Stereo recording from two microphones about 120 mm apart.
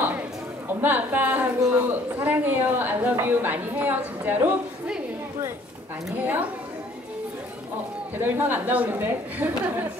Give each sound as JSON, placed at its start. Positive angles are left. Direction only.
{"t": 0.7, "sound": "a woman's voice", "side_deg": -15}
{"t": 8.2, "sound": "a woman's voice", "side_deg": -15}